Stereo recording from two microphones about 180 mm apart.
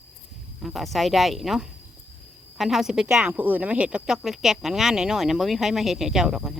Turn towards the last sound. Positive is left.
turn(degrees=-5)  # may be behind; listen again after turning